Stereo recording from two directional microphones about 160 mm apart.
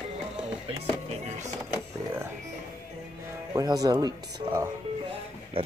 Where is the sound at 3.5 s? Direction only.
25° right (ahead or behind).